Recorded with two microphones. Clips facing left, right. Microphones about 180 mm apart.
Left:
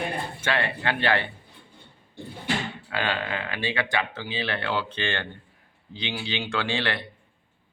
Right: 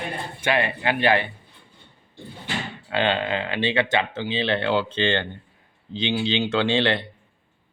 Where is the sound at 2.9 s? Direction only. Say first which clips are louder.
Right 6 dB; 25° right (ahead or behind).